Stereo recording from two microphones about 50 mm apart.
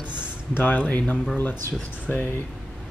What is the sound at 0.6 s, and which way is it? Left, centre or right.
Speech, left.